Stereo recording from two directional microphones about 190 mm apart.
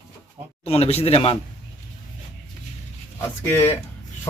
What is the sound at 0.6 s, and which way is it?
Speech, 35° left (ahead or behind).